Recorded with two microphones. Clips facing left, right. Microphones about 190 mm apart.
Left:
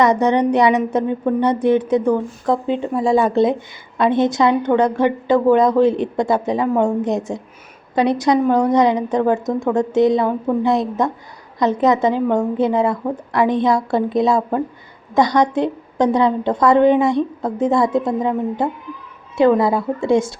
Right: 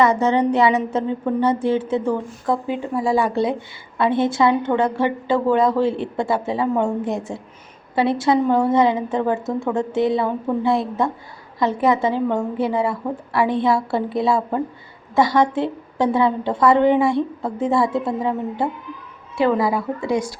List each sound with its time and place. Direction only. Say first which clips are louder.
0.0 s a woman's voice: left 2 dB; 20° left (ahead or behind)